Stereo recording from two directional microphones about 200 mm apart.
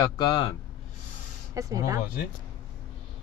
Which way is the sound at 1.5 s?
15° right (ahead or behind).